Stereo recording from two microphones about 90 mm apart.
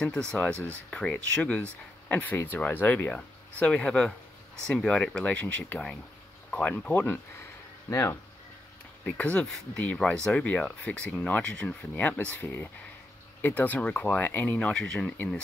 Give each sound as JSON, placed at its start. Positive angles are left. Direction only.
{"t": 0.0, "sound": "speech", "side_deg": 5}
{"t": 7.9, "sound": "speech", "side_deg": 35}
{"t": 9.0, "sound": "speech", "side_deg": 15}
{"t": 14.7, "sound": "speech", "side_deg": 10}